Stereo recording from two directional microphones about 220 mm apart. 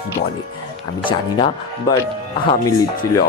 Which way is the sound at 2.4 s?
20° left (ahead or behind).